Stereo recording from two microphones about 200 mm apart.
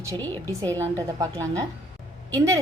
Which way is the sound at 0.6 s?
15° right (ahead or behind).